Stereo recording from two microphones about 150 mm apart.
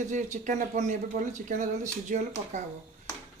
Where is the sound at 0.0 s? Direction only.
55° right (ahead or behind).